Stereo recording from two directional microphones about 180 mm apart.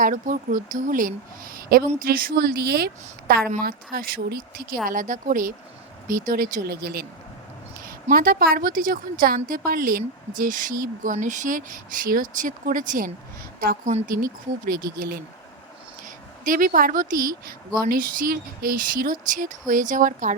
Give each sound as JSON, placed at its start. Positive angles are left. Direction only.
{"t": 0.0, "sound": "a woman's voice", "side_deg": -45}
{"t": 8.1, "sound": "a woman's voice", "side_deg": -55}
{"t": 16.0, "sound": "a woman's voice", "side_deg": -45}